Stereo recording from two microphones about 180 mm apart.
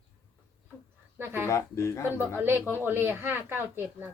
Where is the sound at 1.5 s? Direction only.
15° left (ahead or behind).